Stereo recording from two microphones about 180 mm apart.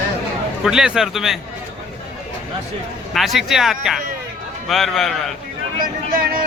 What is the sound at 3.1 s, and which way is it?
Speech, centre (ahead or behind).